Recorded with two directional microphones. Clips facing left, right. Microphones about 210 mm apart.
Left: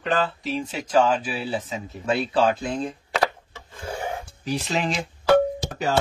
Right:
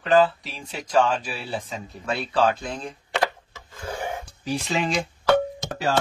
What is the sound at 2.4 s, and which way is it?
Speech, 5° left (ahead or behind).